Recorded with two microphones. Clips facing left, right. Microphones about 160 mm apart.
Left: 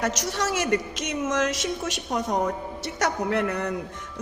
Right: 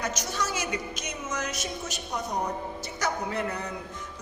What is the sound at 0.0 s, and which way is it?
A woman's voice, 85° left.